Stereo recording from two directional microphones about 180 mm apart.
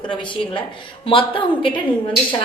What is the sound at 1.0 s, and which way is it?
Speech, 30° left (ahead or behind).